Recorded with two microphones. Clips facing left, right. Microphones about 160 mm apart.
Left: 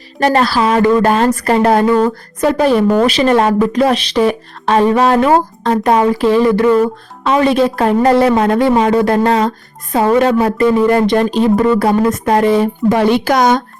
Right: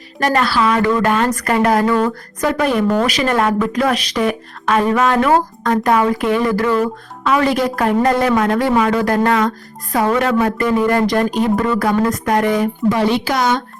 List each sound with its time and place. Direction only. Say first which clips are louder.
0.2 s a woman's voice: left 3 dB; 30° left (ahead or behind)
12.9 s a woman's voice: left 6 dB; 55° left (ahead or behind)